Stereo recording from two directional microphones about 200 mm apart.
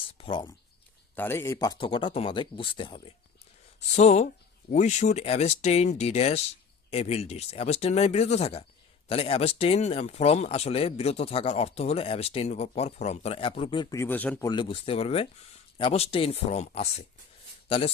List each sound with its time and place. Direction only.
0.2 s speech: 25° left (ahead or behind)
1.1 s speech: 10° left (ahead or behind)
14.5 s a man's voice: 25° left (ahead or behind)